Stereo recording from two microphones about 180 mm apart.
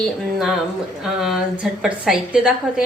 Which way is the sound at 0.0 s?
Centre (ahead or behind).